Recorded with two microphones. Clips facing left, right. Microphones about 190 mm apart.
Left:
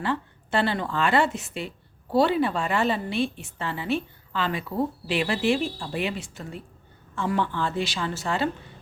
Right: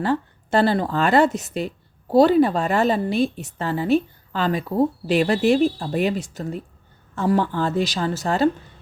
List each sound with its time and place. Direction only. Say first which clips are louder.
0.0 s a woman's voice: right 6 dB; 40° right (ahead or behind)